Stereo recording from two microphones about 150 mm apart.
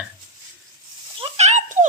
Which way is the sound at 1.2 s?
50° right (ahead or behind).